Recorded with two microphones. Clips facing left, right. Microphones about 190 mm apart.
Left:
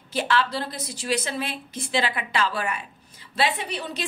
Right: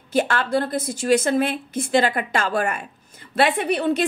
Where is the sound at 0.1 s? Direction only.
50° right (ahead or behind).